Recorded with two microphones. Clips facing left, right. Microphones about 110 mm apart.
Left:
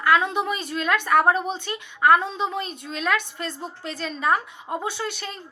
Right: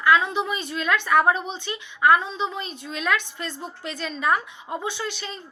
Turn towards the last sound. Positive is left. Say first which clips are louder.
# left 1 dB
turn(degrees=50)  # may be behind; listen again after turning